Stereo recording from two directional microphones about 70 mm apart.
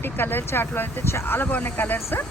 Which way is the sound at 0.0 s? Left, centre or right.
Left.